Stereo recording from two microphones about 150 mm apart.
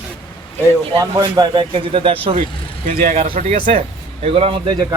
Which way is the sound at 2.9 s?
65° right (ahead or behind).